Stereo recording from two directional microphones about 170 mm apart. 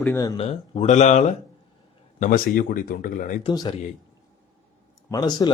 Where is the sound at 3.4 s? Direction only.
25° left (ahead or behind).